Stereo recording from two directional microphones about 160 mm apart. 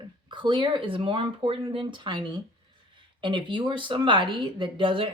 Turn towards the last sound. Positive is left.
turn(degrees=-35)  # may be behind; listen again after turning